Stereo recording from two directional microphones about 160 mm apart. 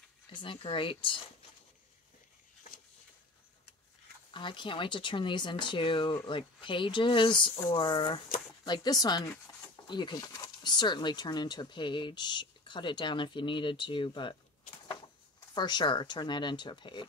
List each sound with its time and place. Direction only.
0.3 s speech: 30° left (ahead or behind)
4.3 s speech: 30° left (ahead or behind)
15.5 s speech: 30° left (ahead or behind)